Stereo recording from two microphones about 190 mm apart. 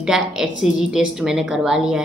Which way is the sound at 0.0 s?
Centre (ahead or behind).